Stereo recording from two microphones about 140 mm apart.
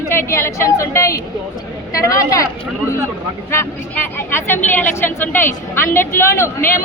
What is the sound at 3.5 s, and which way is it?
A woman's voice, 15° left (ahead or behind).